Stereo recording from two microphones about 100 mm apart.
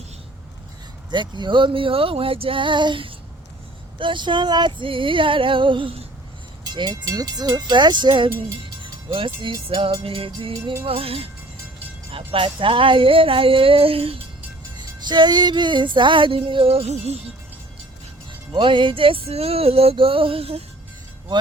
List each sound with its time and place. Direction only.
1.1 s female singing: 50° right (ahead or behind)
6.7 s music: 45° right (ahead or behind)
9.1 s female singing: 60° right (ahead or behind)
10.8 s music: 70° right (ahead or behind)
12.1 s female singing: 60° right (ahead or behind)
14.8 s music: 50° right (ahead or behind); by 17.2 s 90° right
18.3 s music: 55° right (ahead or behind); by 20.7 s 80° right